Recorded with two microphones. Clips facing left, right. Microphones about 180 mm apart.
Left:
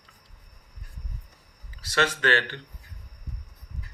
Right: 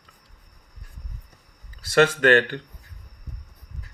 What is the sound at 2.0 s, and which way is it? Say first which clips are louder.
Speech: right 8 dB; 45° right (ahead or behind).